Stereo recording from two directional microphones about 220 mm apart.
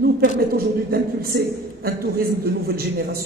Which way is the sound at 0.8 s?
45° right (ahead or behind).